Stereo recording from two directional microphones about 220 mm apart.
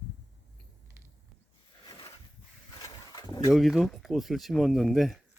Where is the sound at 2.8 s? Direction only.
15° left (ahead or behind).